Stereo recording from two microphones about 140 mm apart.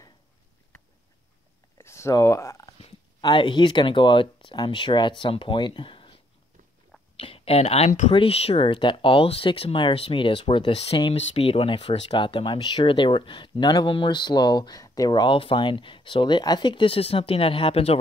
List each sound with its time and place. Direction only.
1.8 s a sound: 20° left (ahead or behind)
2.8 s speech: 35° left (ahead or behind)
7.2 s speech: 45° left (ahead or behind)